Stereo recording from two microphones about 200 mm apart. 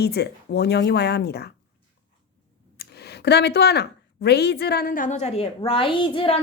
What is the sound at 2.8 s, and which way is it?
A woman's voice, 55° left (ahead or behind).